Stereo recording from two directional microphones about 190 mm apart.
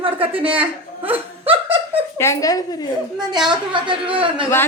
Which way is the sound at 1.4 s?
30° right (ahead or behind).